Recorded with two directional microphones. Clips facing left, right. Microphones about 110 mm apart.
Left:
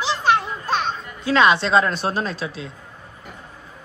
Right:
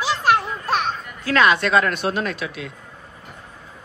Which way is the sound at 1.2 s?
25° left (ahead or behind).